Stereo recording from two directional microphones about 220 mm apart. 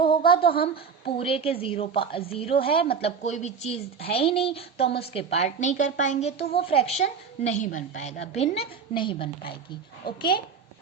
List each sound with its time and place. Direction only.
0.1 s a sound: 25° left (ahead or behind)
0.5 s a woman's voice: 45° left (ahead or behind)
1.1 s a woman's voice: 25° left (ahead or behind)
10.2 s a woman's voice: 20° left (ahead or behind)